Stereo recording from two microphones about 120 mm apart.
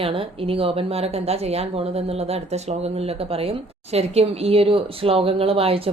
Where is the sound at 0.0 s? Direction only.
50° right (ahead or behind).